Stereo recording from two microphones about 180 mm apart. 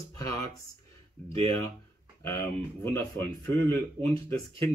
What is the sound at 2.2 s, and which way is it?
Speech, 15° left (ahead or behind).